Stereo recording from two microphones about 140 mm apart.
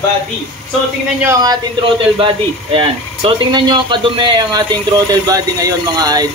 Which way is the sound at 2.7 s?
40° right (ahead or behind).